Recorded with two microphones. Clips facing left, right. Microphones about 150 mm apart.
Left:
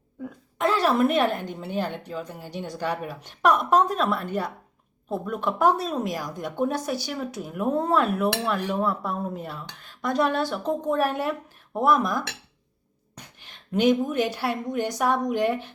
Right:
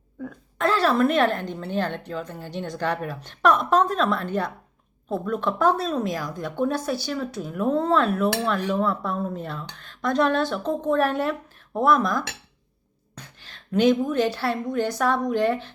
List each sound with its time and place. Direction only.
0.6 s a woman's voice: 15° left (ahead or behind)